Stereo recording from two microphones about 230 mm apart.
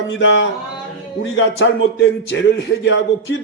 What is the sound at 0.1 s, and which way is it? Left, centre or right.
A man's voice, left.